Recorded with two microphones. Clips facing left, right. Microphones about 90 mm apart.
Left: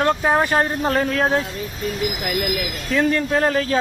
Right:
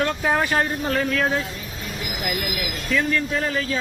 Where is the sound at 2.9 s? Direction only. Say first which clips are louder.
Left 4 dB; 40° left (ahead or behind).